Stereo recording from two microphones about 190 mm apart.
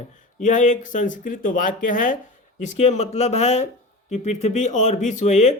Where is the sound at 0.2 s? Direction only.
40° left (ahead or behind).